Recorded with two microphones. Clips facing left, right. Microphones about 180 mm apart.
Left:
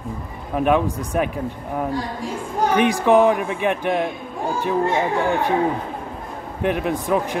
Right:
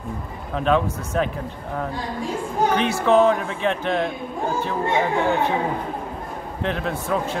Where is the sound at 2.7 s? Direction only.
15° left (ahead or behind).